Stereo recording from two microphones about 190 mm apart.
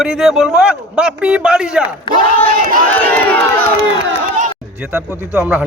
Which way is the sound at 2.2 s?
45° right (ahead or behind).